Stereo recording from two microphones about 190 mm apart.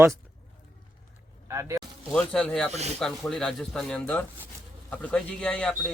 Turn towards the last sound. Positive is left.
turn(degrees=5)  # may be behind; listen again after turning